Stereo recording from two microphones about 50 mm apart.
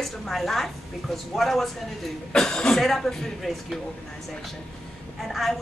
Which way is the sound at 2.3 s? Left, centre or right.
Centre.